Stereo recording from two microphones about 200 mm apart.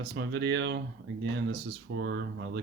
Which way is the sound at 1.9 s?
65° right (ahead or behind).